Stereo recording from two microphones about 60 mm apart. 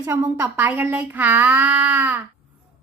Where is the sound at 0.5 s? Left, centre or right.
Right.